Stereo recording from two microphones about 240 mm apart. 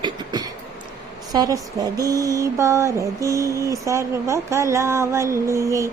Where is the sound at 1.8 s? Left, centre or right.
Centre.